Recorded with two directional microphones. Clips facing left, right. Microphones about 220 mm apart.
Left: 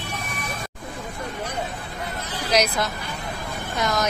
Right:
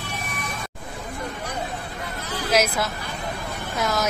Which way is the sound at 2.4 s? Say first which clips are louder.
Even; 5° right (ahead or behind).